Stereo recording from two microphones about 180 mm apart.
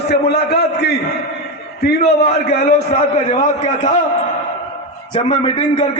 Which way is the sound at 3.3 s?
40° left (ahead or behind).